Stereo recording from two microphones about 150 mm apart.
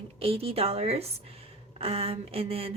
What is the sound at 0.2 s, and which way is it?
A woman's voice, 40° right (ahead or behind).